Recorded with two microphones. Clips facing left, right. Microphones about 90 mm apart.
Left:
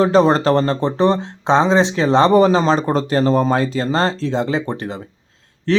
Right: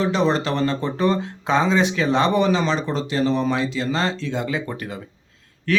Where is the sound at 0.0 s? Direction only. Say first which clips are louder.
Left 7 dB; 40° left (ahead or behind).